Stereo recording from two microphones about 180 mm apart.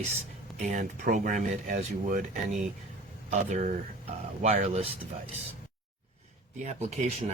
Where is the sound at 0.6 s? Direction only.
45° right (ahead or behind).